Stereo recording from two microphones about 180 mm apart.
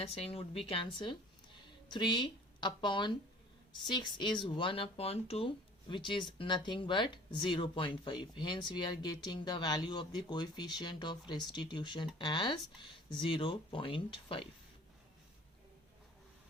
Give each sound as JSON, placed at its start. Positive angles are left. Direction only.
{"t": 0.0, "sound": "speech", "side_deg": 35}